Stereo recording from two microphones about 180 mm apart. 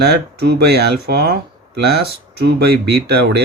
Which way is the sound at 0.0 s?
65° right (ahead or behind).